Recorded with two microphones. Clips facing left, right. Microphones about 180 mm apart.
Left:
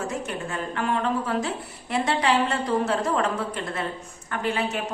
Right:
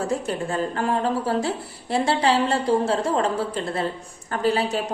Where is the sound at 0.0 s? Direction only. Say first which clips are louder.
Right 5 dB; 35° right (ahead or behind).